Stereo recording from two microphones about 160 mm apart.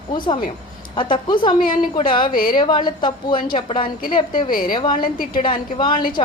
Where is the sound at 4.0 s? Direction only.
60° left (ahead or behind).